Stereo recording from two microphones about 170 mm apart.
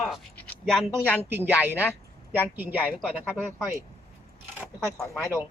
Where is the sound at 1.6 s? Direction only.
10° left (ahead or behind).